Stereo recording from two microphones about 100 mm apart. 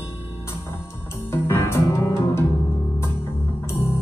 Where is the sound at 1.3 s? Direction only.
25° left (ahead or behind).